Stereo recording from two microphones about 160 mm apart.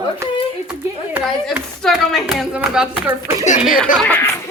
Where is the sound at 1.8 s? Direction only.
5° left (ahead or behind).